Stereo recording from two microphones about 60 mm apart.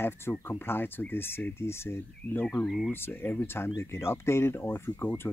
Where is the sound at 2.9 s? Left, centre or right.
Left.